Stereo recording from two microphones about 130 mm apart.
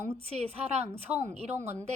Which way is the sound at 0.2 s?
50° right (ahead or behind).